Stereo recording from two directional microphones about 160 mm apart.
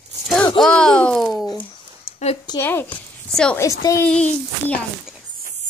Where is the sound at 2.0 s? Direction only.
40° left (ahead or behind).